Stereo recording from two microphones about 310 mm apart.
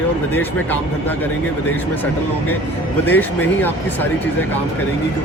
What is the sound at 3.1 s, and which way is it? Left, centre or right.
Speech, centre.